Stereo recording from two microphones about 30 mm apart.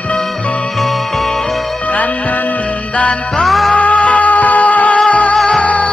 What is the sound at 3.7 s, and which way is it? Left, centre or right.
Music, left.